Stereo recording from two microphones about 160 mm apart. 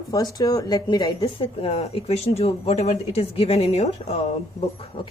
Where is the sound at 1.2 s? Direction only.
35° left (ahead or behind).